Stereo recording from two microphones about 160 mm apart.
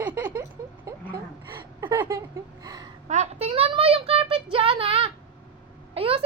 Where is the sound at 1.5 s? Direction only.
30° right (ahead or behind).